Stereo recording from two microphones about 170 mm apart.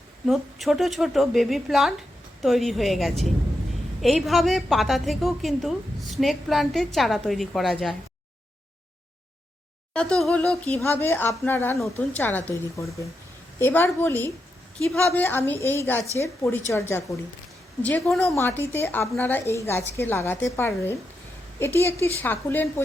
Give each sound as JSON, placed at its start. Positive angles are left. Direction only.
{"t": 0.3, "sound": "a woman's voice", "side_deg": 0}
{"t": 9.9, "sound": "a woman's voice", "side_deg": 5}
{"t": 17.8, "sound": "a woman's voice", "side_deg": 0}
{"t": 18.3, "sound": "a woman's voice", "side_deg": 10}